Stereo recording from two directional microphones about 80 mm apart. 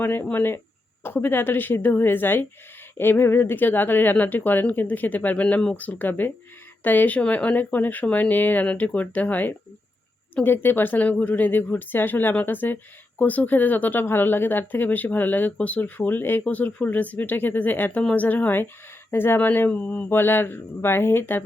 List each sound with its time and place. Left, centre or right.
0.0 s speech: left